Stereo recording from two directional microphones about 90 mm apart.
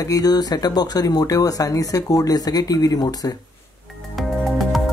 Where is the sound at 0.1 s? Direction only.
45° left (ahead or behind).